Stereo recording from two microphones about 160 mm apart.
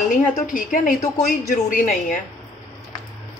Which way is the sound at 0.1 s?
60° left (ahead or behind).